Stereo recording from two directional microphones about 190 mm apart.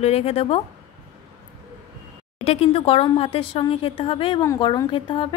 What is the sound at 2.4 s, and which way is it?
Speech, 30° left (ahead or behind).